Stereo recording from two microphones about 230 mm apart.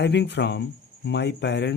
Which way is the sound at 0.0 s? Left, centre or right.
Left.